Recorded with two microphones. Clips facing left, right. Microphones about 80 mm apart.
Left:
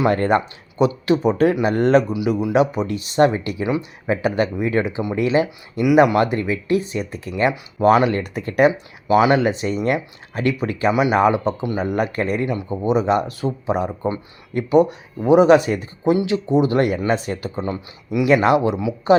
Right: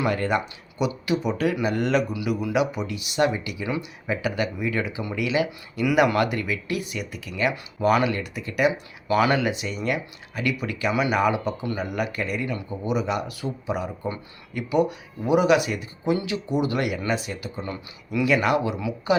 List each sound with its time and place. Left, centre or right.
0.1 s speech: left
2.1 s speech: left
8.1 s speech: left
9.0 s speech: centre
9.4 s speech: left
10.9 s speech: left
11.2 s speech: left
16.1 s speech: left
17.7 s speech: centre